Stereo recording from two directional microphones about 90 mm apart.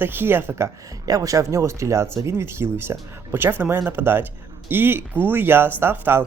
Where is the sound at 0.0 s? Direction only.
25° right (ahead or behind).